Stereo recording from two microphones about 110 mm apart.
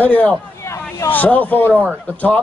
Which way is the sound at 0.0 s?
15° left (ahead or behind).